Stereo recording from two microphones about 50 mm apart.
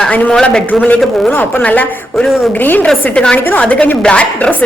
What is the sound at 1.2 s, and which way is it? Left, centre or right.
Speech, left.